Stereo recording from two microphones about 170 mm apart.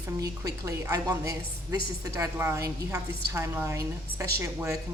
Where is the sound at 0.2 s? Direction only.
20° right (ahead or behind).